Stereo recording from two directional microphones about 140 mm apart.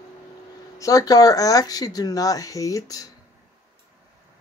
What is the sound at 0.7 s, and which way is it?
Speech, 25° left (ahead or behind).